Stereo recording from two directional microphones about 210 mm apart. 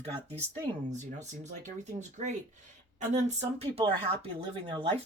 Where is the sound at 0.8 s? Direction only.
35° right (ahead or behind).